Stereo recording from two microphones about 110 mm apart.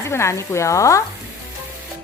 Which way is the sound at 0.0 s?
25° left (ahead or behind).